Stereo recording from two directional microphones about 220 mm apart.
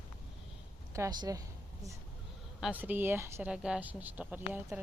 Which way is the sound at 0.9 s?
15° right (ahead or behind).